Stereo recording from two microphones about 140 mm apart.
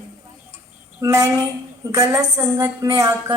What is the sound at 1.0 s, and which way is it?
A woman's voice, 20° right (ahead or behind).